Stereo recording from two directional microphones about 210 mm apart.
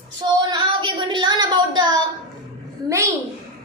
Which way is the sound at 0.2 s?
20° right (ahead or behind).